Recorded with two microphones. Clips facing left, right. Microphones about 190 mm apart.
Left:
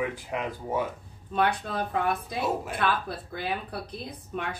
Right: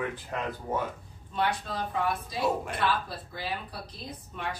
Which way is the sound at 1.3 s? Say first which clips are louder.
Left 3 dB; 55° left (ahead or behind).